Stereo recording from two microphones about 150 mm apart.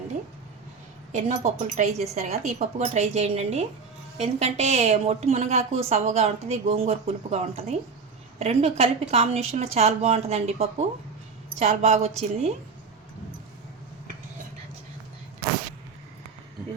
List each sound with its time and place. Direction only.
1.1 s a woman's voice: 50° right (ahead or behind)